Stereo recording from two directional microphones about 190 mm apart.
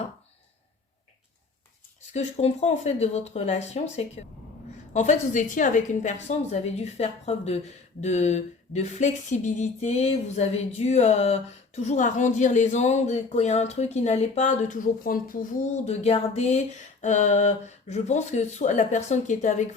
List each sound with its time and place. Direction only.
2.1 s a woman's voice: 35° left (ahead or behind)